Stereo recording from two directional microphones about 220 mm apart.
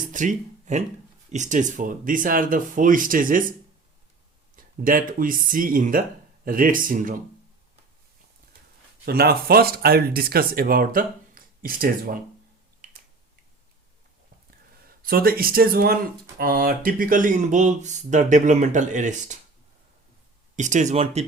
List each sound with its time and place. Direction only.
0.1 s speech: 35° right (ahead or behind)
4.5 s speech: 40° right (ahead or behind)
9.0 s speech: 45° right (ahead or behind)
12.8 s finger snapping: 35° right (ahead or behind)
14.8 s speech: 40° right (ahead or behind)
20.6 s speech: 35° right (ahead or behind)